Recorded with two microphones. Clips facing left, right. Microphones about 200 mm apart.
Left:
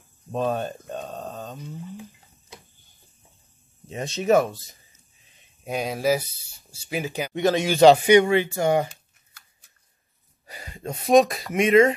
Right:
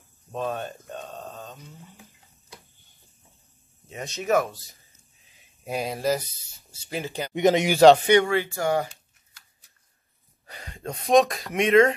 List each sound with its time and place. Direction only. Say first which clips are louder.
0.3 s a sound: left 4 dB; 35° left (ahead or behind)
3.9 s speech: left 4 dB; 30° left (ahead or behind)
5.4 s speech: left 1 dB; centre (ahead or behind)
7.3 s speech: right 2 dB; 20° right (ahead or behind)
8.1 s speech: left 3 dB; 20° left (ahead or behind)
10.4 s speech: left 1 dB; 5° left (ahead or behind)